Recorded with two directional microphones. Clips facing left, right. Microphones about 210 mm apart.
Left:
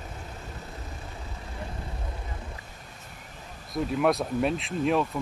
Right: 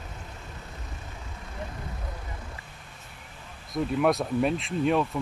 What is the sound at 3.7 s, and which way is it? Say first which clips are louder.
Speech: even; centre (ahead or behind).